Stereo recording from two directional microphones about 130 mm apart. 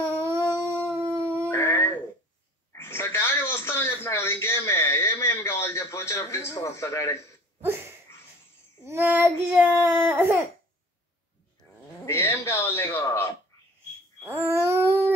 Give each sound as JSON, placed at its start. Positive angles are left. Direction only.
{"t": 0.1, "sound": "dog", "side_deg": -20}
{"t": 1.5, "sound": "music", "side_deg": 20}
{"t": 2.7, "sound": "a sound", "side_deg": 20}
{"t": 8.8, "sound": "speech", "side_deg": -20}
{"t": 12.1, "sound": "speech", "side_deg": 20}
{"t": 14.2, "sound": "babbling", "side_deg": -20}